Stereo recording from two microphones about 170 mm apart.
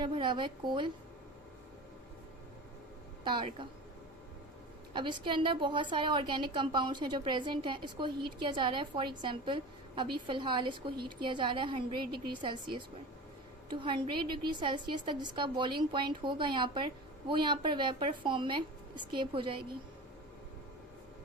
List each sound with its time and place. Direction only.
0.0 s a woman's voice: 30° right (ahead or behind)
3.2 s a woman's voice: 30° right (ahead or behind)
4.9 s a woman's voice: 25° right (ahead or behind)